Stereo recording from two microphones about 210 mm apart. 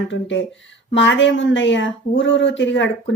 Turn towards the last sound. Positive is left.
turn(degrees=60)  # may be behind; listen again after turning